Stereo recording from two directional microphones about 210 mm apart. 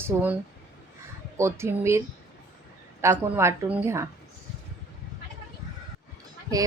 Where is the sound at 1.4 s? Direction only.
10° right (ahead or behind).